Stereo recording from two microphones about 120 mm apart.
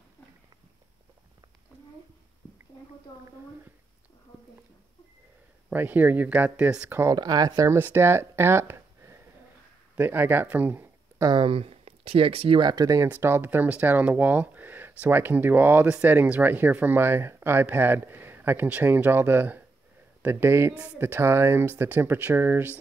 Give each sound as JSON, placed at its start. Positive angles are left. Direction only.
{"t": 5.7, "sound": "speech", "side_deg": -15}
{"t": 7.2, "sound": "speech", "side_deg": -35}
{"t": 11.2, "sound": "speech", "side_deg": -45}
{"t": 13.1, "sound": "speech", "side_deg": -20}